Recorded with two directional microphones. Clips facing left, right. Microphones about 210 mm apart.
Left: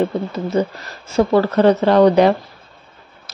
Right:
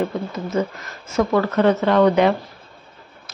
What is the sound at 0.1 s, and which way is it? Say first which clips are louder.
Speech: left 4 dB; 30° left (ahead or behind).